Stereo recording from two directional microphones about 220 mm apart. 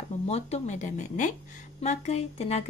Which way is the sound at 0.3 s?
30° left (ahead or behind).